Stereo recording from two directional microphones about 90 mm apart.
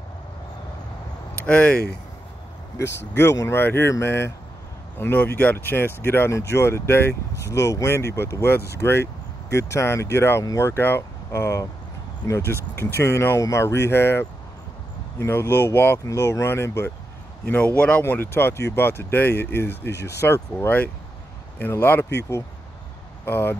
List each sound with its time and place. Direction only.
1.4 s speech: 15° left (ahead or behind)
3.2 s speech: 30° left (ahead or behind)
17.7 s speech: 15° left (ahead or behind)